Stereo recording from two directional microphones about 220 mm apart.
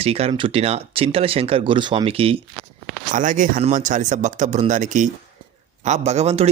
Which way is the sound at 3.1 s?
35° right (ahead or behind).